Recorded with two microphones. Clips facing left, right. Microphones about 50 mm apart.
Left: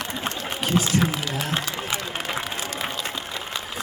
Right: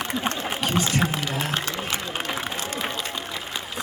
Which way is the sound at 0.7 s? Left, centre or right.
Right.